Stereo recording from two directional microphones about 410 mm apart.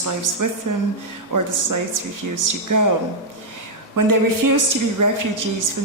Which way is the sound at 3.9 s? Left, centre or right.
Right.